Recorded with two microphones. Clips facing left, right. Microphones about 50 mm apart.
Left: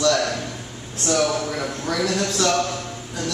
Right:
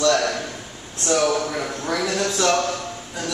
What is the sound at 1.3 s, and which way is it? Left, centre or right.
A man's voice, centre.